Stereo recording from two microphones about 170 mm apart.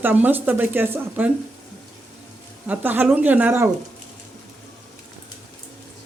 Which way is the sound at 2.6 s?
10° right (ahead or behind).